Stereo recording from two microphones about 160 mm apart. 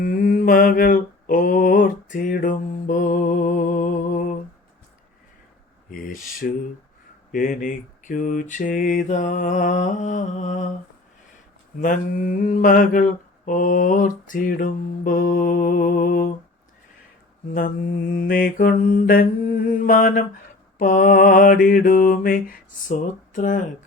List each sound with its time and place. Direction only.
0.0 s mantra: 65° left (ahead or behind)
5.9 s mantra: 60° left (ahead or behind)
11.8 s mantra: 60° left (ahead or behind)
18.1 s mantra: 60° left (ahead or behind)